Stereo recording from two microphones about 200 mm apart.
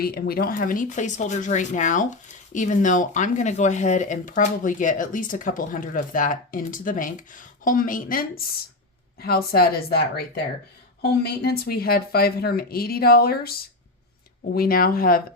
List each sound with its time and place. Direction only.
0.0 s speech: 50° left (ahead or behind)